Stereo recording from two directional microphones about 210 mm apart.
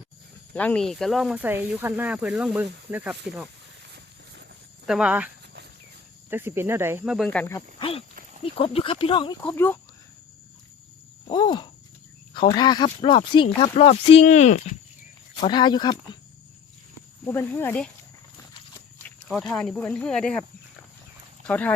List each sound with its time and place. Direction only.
0.5 s speech: 5° left (ahead or behind)
4.9 s speech: 5° right (ahead or behind)
6.3 s speech: 10° right (ahead or behind)
7.3 s speech: 10° left (ahead or behind)
8.5 s speech: 25° left (ahead or behind)
9.4 s speech: 5° left (ahead or behind)
11.3 s a sound: 20° left (ahead or behind)
12.3 s speech: 20° left (ahead or behind)
15.4 s speech: 20° left (ahead or behind)
17.2 s speech: 10° left (ahead or behind)
19.5 s speech: centre (ahead or behind)
21.4 s speech: 5° left (ahead or behind)